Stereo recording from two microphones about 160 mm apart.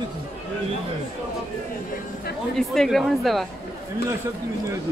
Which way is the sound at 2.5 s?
Centre (ahead or behind).